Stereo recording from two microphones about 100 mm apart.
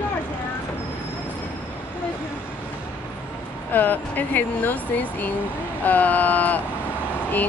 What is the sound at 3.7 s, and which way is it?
Speech, 20° left (ahead or behind).